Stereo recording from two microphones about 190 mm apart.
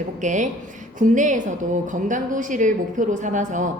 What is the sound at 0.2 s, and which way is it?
A woman's voice, 40° right (ahead or behind).